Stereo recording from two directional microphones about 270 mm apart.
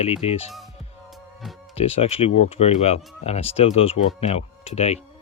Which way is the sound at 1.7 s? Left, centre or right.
Left.